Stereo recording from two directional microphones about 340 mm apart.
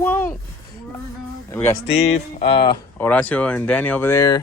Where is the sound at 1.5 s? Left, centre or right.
Centre.